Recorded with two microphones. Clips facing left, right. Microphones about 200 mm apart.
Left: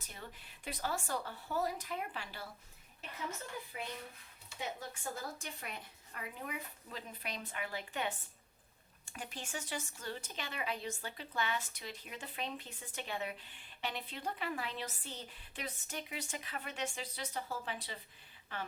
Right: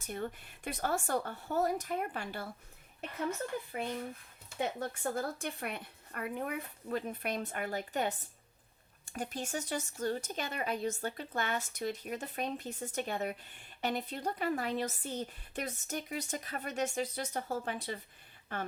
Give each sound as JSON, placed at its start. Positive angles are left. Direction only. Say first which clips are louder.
{"t": 0.1, "sound": "speech", "louder": "right 13 dB", "side_deg": -55}
{"t": 3.7, "sound": "speech", "louder": "right 8 dB", "side_deg": -55}